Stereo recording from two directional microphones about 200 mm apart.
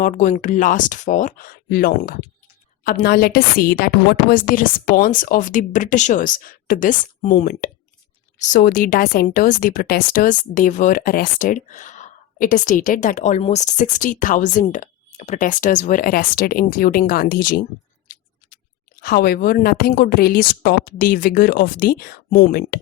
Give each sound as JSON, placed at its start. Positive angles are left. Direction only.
{"t": 0.0, "sound": "a woman's voice", "side_deg": 40}
{"t": 19.0, "sound": "a woman's voice", "side_deg": 50}